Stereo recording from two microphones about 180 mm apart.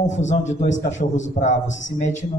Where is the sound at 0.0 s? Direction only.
40° left (ahead or behind).